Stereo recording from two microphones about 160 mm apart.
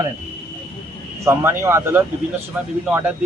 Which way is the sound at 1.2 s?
15° right (ahead or behind).